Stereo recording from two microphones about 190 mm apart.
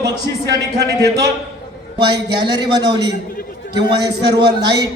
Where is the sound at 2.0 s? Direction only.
25° right (ahead or behind).